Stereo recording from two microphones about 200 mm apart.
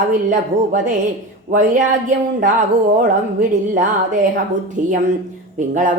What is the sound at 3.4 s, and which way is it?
Speech, 40° right (ahead or behind).